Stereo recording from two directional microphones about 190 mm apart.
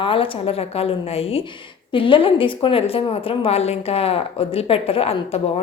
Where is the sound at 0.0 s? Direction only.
30° left (ahead or behind).